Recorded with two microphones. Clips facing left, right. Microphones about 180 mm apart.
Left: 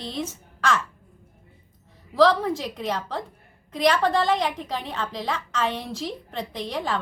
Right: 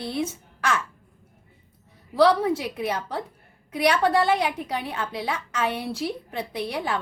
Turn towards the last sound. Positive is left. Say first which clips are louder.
# even
turn(degrees=-10)  # may be behind; listen again after turning